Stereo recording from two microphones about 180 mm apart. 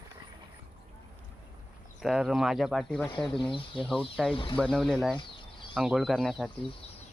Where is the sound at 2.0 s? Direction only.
Centre (ahead or behind).